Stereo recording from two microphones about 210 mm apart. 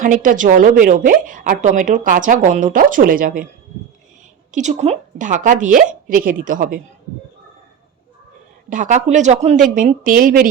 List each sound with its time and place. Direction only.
0.0 s a woman's voice: 40° right (ahead or behind)
4.5 s a woman's voice: 35° right (ahead or behind)
8.7 s a woman's voice: 35° right (ahead or behind)